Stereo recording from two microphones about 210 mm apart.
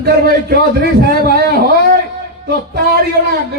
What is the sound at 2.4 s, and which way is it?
Speech, 50° right (ahead or behind).